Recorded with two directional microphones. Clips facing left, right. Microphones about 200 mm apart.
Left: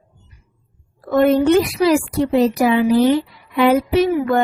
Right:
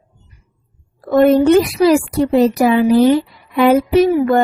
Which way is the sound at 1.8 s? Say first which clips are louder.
Right 3 dB; 40° right (ahead or behind).